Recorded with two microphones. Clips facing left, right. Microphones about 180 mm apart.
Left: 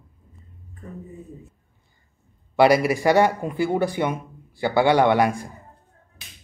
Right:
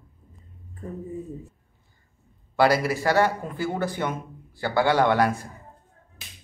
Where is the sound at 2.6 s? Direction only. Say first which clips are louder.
Left 4 dB; 15° left (ahead or behind).